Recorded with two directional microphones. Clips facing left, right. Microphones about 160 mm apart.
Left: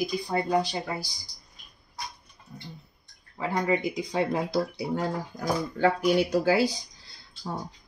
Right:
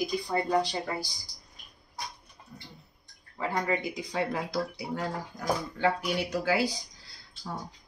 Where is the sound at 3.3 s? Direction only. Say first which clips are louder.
Left 3 dB; 15° left (ahead or behind).